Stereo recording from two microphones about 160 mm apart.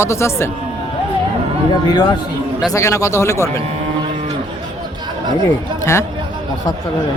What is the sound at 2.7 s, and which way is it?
Speech, 20° left (ahead or behind).